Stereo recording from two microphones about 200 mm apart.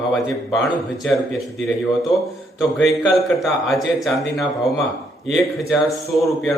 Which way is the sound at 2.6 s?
5° left (ahead or behind).